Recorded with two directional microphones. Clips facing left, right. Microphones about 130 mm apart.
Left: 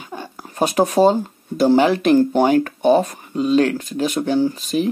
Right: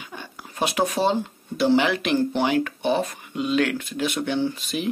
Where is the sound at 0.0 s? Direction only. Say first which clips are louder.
Left 6 dB; 40° left (ahead or behind).